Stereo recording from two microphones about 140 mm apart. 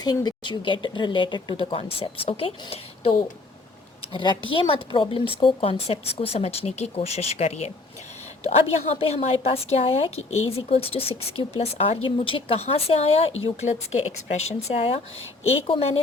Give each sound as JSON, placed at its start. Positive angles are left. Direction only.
{"t": 0.0, "sound": "speech", "side_deg": 30}
{"t": 4.1, "sound": "speech", "side_deg": 35}